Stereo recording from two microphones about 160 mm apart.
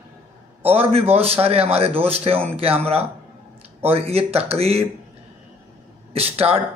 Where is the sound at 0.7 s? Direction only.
40° right (ahead or behind).